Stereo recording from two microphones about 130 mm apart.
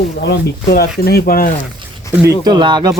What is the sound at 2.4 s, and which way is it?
Speech, 35° right (ahead or behind).